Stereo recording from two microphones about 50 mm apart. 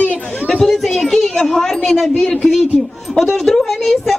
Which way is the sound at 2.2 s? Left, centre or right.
Centre.